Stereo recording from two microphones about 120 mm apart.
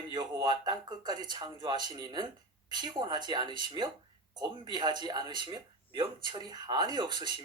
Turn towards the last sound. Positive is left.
turn(degrees=-40)  # may be behind; listen again after turning